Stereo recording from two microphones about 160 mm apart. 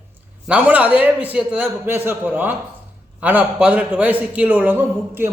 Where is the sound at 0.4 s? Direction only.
10° right (ahead or behind).